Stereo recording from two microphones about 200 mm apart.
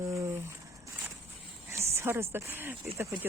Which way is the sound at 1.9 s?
10° right (ahead or behind).